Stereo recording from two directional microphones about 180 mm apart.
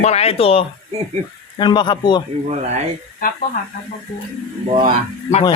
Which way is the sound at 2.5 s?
40° right (ahead or behind).